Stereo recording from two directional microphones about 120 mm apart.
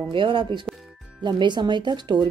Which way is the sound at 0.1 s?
45° right (ahead or behind).